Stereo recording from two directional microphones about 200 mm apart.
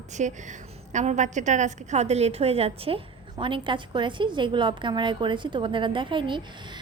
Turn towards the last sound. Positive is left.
turn(degrees=-25)  # may be behind; listen again after turning